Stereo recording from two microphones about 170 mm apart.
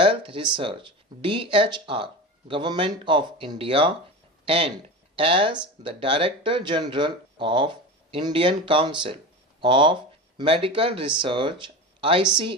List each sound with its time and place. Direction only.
0.0 s speech: 30° right (ahead or behind)